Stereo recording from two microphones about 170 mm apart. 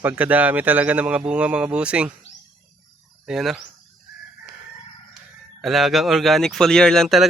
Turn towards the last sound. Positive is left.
turn(degrees=0)  # may be behind; listen again after turning